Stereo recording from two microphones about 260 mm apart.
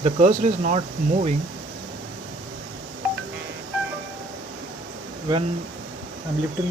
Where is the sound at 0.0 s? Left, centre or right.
Right.